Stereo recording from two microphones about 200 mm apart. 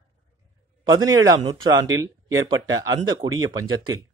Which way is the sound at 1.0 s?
20° right (ahead or behind).